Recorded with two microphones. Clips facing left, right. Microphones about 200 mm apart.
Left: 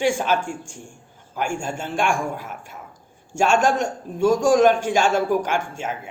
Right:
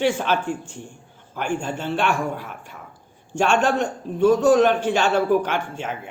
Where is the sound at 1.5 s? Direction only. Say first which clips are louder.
Right 1 dB; 10° left (ahead or behind).